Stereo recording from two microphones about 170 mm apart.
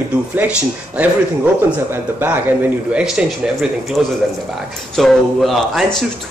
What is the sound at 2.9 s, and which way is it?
Speech, 5° right (ahead or behind).